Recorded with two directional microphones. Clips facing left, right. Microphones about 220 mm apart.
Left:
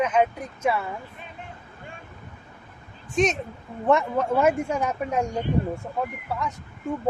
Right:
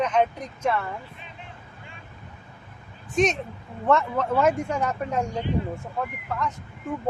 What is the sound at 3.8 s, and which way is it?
Speech, 15° left (ahead or behind).